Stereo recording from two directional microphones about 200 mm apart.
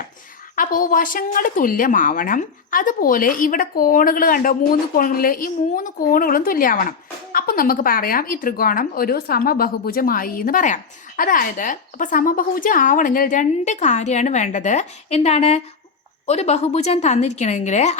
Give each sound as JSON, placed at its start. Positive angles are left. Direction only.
{"t": 0.5, "sound": "a woman's voice", "side_deg": 40}